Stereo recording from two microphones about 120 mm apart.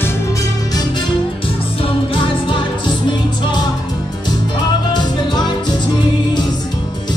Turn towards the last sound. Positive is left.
turn(degrees=35)  # may be behind; listen again after turning